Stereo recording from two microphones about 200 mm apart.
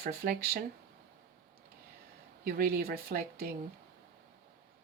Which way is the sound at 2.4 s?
50° right (ahead or behind).